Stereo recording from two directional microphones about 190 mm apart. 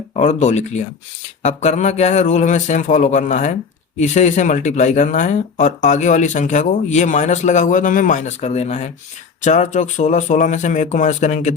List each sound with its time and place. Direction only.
0.2 s speech: 40° left (ahead or behind)